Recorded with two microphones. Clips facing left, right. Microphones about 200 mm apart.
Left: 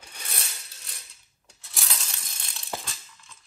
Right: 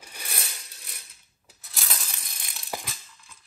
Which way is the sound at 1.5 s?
Centre (ahead or behind).